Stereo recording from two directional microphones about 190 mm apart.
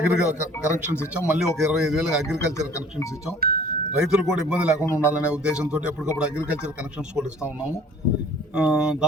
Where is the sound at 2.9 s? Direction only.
15° left (ahead or behind).